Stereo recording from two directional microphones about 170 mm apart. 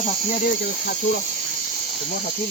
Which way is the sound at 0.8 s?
60° left (ahead or behind).